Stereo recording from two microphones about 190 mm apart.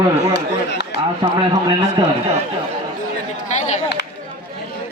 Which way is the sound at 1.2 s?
25° right (ahead or behind).